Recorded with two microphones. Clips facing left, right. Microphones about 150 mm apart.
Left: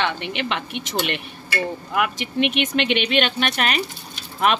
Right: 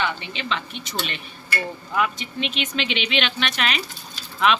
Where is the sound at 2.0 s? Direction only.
60° left (ahead or behind).